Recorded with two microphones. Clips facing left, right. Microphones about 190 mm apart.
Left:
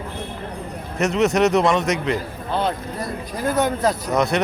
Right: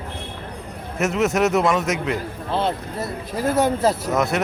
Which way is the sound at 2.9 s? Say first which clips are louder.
Right 1 dB; 25° right (ahead or behind).